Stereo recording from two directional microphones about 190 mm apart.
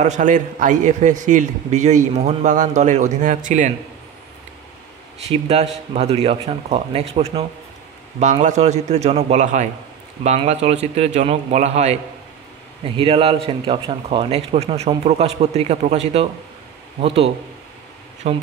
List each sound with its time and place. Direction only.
0.0 s a man's voice: 40° right (ahead or behind)
5.3 s a man's voice: 35° right (ahead or behind)